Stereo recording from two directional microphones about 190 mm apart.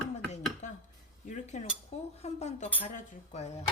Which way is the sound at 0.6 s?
40° left (ahead or behind).